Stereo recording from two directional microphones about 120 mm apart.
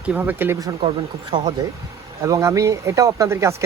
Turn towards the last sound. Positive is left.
turn(degrees=-25)  # may be behind; listen again after turning